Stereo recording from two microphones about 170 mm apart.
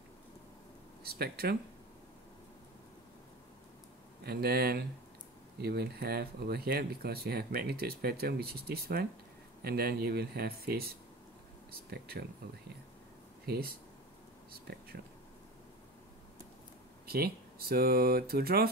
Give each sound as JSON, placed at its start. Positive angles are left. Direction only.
{"t": 1.0, "sound": "speech", "side_deg": -65}
{"t": 4.2, "sound": "speech", "side_deg": -65}
{"t": 11.9, "sound": "speech", "side_deg": -70}
{"t": 13.5, "sound": "speech", "side_deg": -65}
{"t": 17.0, "sound": "speech", "side_deg": -65}